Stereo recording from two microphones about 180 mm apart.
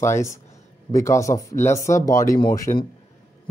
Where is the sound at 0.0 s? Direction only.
15° left (ahead or behind).